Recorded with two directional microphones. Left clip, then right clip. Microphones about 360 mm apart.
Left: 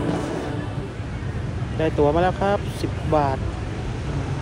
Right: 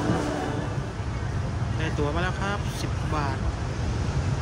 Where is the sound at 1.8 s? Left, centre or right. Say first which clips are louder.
Left 10 dB; centre.